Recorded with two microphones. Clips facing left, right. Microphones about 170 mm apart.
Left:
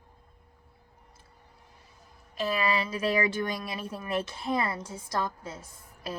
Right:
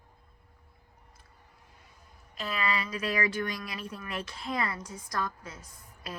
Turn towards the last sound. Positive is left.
turn(degrees=25)  # may be behind; listen again after turning